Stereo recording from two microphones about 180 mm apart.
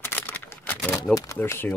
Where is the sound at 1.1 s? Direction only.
15° left (ahead or behind).